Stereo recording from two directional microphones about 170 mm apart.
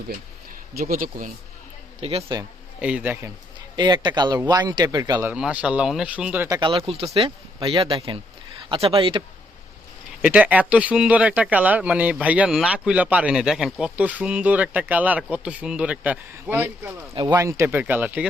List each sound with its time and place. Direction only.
0.8 s speech: 55° right (ahead or behind)
2.0 s speech: 35° right (ahead or behind)
2.8 s speech: 10° right (ahead or behind)
3.8 s speech: 25° right (ahead or behind)
5.2 s speech: 5° right (ahead or behind)
6.5 s speech: 30° right (ahead or behind)
10.2 s speech: 10° right (ahead or behind)